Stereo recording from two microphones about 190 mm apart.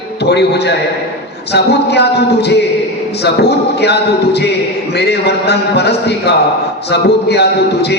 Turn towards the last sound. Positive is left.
turn(degrees=60)  # may be behind; listen again after turning